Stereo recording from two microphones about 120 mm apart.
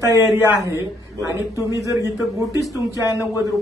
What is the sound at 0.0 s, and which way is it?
A man's voice, 25° right (ahead or behind).